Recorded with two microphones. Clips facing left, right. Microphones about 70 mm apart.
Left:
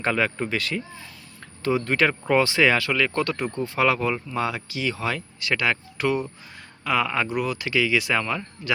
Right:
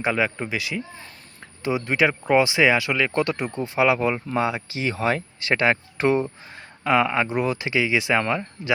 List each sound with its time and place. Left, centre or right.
0.0 s speech: centre